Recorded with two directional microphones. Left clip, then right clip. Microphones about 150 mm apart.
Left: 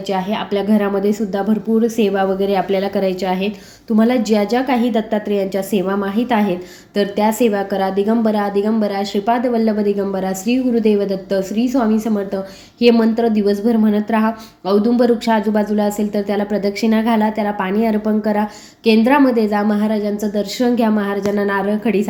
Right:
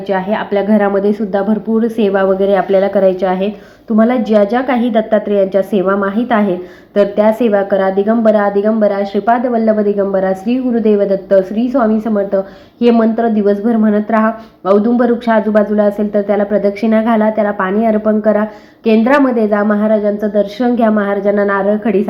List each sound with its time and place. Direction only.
0.1 s a woman's voice: 15° left (ahead or behind)